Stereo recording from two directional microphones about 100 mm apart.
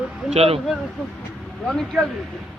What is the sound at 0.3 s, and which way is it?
Speech, 80° right.